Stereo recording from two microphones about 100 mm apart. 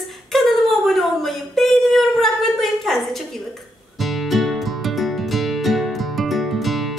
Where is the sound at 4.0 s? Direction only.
Centre (ahead or behind).